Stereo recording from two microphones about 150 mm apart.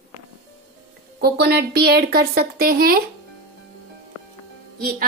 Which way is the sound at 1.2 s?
90° right.